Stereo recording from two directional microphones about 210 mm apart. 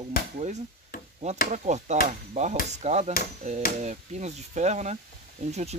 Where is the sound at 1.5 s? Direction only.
35° right (ahead or behind).